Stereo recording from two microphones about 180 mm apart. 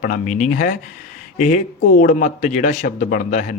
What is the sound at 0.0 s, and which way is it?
Speech, 45° left (ahead or behind).